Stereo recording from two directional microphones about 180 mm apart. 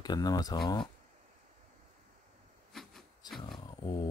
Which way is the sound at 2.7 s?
Centre (ahead or behind).